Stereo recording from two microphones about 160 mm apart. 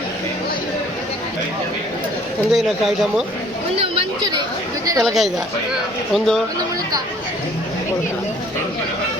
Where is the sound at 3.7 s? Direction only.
35° right (ahead or behind).